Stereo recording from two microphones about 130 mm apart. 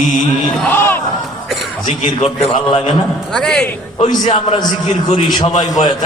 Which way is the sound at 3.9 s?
45° left (ahead or behind).